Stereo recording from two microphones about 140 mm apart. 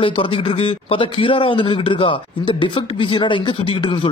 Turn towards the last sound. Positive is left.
turn(degrees=40)  # may be behind; listen again after turning